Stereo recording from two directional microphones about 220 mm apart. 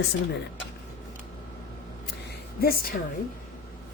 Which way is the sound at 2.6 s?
45° left (ahead or behind).